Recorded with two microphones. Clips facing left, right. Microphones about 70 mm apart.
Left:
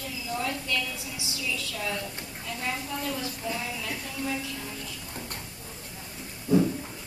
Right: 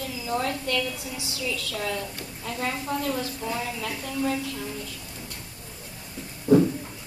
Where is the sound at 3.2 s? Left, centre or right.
Right.